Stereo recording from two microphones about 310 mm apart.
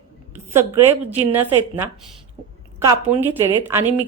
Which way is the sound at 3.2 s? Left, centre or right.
Centre.